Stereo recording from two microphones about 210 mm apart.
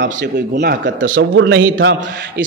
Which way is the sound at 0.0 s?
55° right (ahead or behind).